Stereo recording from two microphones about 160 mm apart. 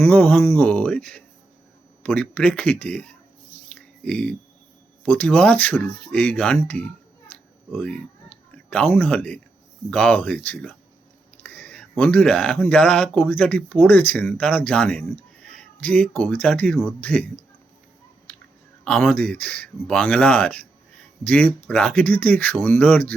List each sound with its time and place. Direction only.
0.0 s speech: 10° left (ahead or behind)
3.7 s a sound: 5° left (ahead or behind)
5.0 s speech: 10° left (ahead or behind)
18.9 s speech: 5° left (ahead or behind)